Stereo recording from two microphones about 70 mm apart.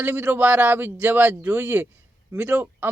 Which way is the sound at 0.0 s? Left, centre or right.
Right.